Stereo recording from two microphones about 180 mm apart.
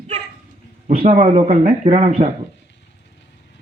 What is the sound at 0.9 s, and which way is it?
Speech, 35° right (ahead or behind).